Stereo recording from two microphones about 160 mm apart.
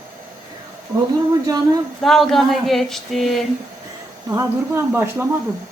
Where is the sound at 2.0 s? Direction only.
Centre (ahead or behind).